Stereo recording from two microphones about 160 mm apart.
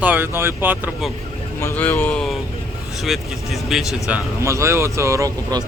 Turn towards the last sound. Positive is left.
turn(degrees=-20)  # may be behind; listen again after turning